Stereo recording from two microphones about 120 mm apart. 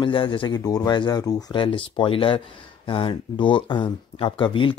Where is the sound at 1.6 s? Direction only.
45° left (ahead or behind).